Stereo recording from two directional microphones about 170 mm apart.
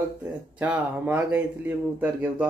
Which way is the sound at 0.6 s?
10° right (ahead or behind).